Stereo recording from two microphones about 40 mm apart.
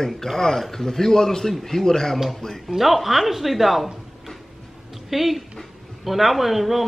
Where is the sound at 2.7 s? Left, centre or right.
Centre.